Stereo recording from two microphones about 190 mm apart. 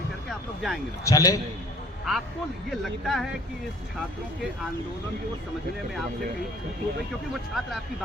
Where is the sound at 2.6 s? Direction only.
Centre (ahead or behind).